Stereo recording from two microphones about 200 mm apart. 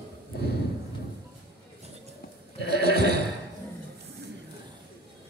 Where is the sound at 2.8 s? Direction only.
55° right (ahead or behind).